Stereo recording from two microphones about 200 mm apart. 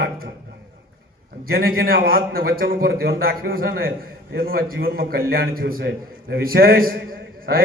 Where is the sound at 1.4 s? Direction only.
50° right (ahead or behind).